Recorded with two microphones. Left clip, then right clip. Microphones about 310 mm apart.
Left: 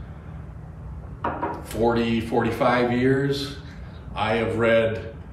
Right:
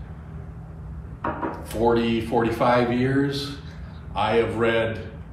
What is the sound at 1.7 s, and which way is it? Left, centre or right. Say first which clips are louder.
A man's voice: right 2 dB; centre.